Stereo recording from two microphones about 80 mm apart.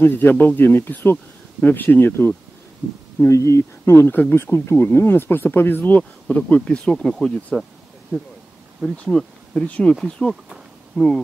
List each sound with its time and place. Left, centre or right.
0.0 s speech: left
3.2 s speech: left; by 7.3 s centre
8.9 s speech: centre